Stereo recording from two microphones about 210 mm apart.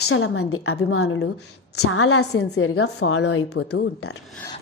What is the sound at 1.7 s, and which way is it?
Speech, 90° left.